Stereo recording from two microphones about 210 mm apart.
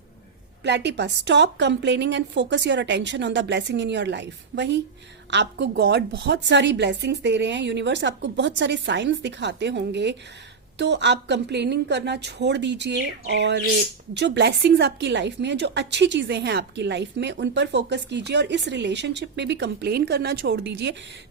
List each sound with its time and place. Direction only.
0.6 s a woman's voice: 55° right (ahead or behind)